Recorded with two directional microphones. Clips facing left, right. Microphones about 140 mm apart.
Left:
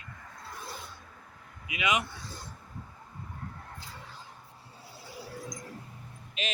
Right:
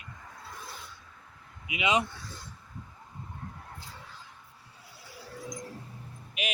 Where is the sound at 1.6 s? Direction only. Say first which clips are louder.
Right 2 dB; 20° right (ahead or behind).